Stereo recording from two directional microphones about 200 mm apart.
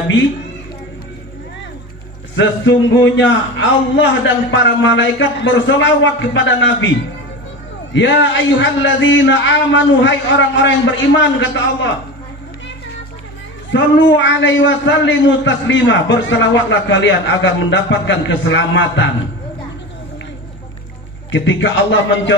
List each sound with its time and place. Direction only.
2.3 s a man's voice: 65° left (ahead or behind)
7.9 s a man's voice: 65° left (ahead or behind)
13.7 s a man's voice: 65° left (ahead or behind)
21.3 s a man's voice: 65° left (ahead or behind)